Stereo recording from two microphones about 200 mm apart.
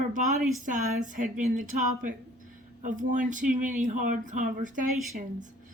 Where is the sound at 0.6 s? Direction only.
40° right (ahead or behind).